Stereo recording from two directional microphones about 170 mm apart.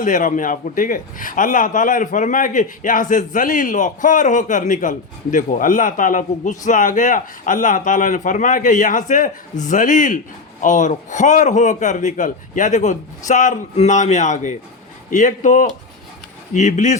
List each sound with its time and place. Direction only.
0.0 s a man's voice: 50° left (ahead or behind)